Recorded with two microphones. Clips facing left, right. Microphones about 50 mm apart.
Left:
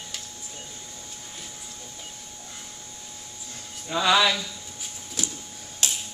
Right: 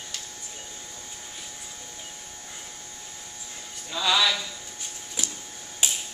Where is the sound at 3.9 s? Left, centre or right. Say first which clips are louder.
Left 3 dB; centre.